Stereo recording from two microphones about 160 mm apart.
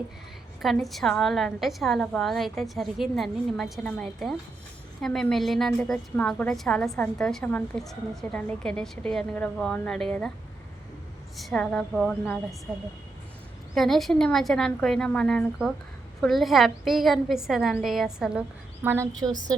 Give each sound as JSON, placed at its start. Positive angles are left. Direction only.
{"t": 0.6, "sound": "a woman's voice", "side_deg": 0}
{"t": 11.3, "sound": "a woman's voice", "side_deg": 0}
{"t": 13.7, "sound": "a woman's voice", "side_deg": 0}